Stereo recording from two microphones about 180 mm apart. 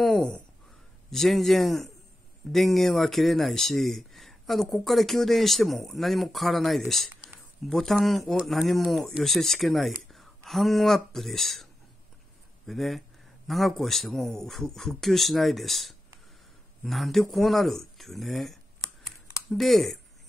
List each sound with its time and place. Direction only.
0.0 s speech: 5° left (ahead or behind)
12.6 s speech: centre (ahead or behind)